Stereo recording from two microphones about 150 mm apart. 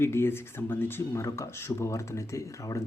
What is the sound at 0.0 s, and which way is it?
Speech, 15° left (ahead or behind).